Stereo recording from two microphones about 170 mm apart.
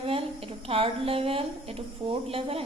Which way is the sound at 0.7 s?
35° right (ahead or behind).